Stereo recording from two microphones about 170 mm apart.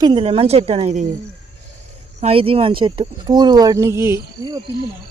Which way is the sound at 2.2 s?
35° right (ahead or behind).